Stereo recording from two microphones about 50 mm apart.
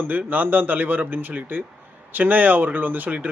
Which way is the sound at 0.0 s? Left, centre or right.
Right.